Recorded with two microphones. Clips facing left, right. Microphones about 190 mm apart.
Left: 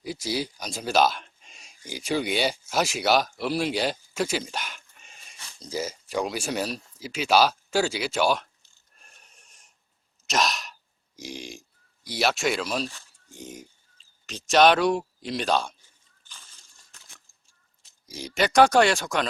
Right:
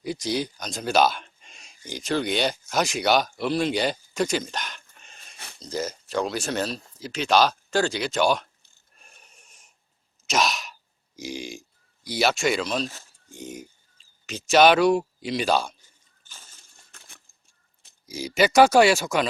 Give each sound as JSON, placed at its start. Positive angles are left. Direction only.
{"t": 0.0, "sound": "speech", "side_deg": 5}
{"t": 9.0, "sound": "a sound", "side_deg": 0}
{"t": 10.2, "sound": "sigh", "side_deg": 0}
{"t": 11.2, "sound": "speech", "side_deg": 0}
{"t": 16.2, "sound": "a sound", "side_deg": -45}
{"t": 18.0, "sound": "speech", "side_deg": -5}